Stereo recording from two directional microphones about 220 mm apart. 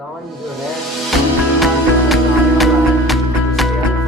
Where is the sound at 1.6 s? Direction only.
Centre (ahead or behind).